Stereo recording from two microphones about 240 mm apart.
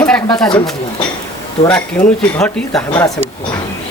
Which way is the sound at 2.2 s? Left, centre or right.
Centre.